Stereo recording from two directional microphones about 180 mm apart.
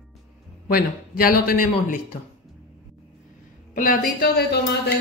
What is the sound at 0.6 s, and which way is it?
A man's voice, 55° left (ahead or behind).